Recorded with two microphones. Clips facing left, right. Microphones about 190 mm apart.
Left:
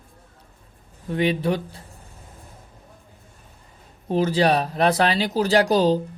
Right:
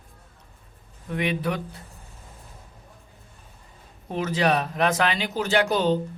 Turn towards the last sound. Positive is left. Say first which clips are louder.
# left 4 dB
turn(degrees=35)  # may be behind; listen again after turning